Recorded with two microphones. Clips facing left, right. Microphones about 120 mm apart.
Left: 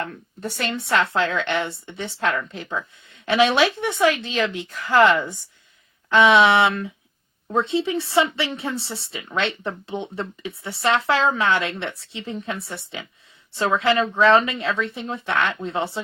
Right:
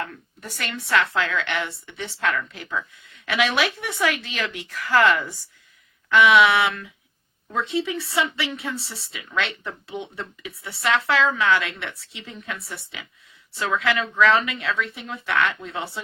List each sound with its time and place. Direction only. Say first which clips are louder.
0.1 s speech: left 7 dB; 30° left (ahead or behind)